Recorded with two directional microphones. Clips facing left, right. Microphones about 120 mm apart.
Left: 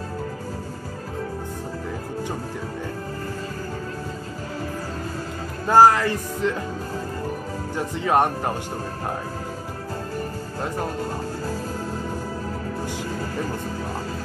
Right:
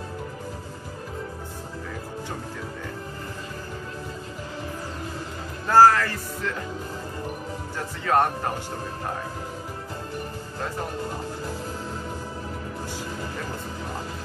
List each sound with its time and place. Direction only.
5.7 s speech: 20° left (ahead or behind)
7.7 s speech: 20° left (ahead or behind)